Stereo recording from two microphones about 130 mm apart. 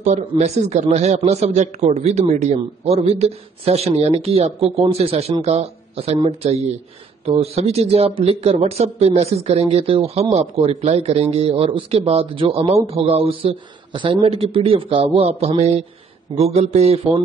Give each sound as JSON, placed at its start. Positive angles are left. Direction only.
{"t": 0.3, "sound": "a man's voice", "side_deg": -55}